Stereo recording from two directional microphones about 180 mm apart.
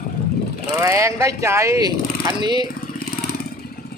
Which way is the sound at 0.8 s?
15° right (ahead or behind).